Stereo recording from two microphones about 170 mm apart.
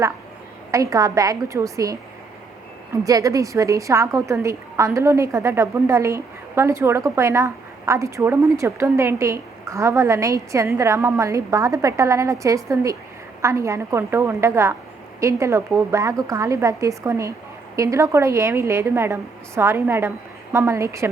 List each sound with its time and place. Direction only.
0.7 s a woman's voice: 20° right (ahead or behind)